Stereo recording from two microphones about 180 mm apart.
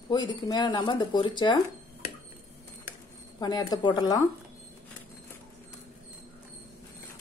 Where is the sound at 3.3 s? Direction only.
20° left (ahead or behind).